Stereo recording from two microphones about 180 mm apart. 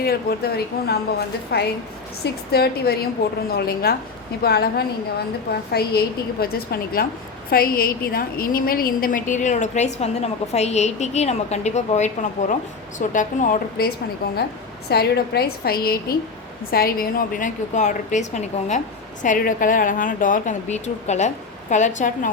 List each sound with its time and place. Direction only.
0.0 s a woman's voice: 60° left (ahead or behind)
14.8 s a woman's voice: 65° left (ahead or behind); by 22.3 s 45° left (ahead or behind)